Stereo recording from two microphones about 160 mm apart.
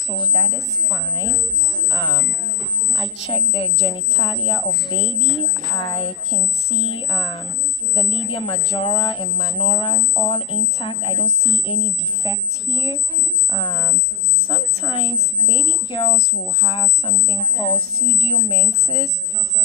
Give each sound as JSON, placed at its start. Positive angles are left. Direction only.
{"t": 0.9, "sound": "speech", "side_deg": 30}